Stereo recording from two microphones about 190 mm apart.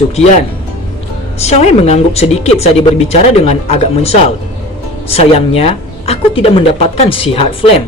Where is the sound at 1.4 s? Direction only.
35° left (ahead or behind).